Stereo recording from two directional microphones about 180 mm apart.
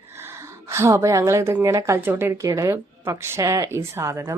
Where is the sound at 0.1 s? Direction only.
15° right (ahead or behind).